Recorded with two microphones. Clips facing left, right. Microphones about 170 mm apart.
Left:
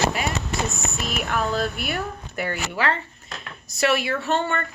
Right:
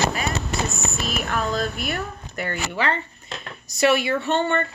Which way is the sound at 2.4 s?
5° left (ahead or behind).